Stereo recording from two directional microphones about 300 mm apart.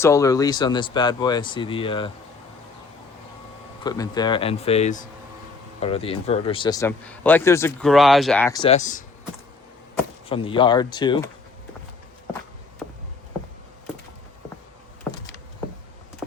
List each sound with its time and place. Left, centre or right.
0.0 s a man's voice: centre
3.8 s a man's voice: centre
10.2 s a man's voice: centre